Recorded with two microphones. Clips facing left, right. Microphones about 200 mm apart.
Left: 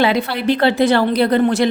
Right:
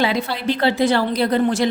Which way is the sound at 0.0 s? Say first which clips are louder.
Left 4 dB; 65° left (ahead or behind).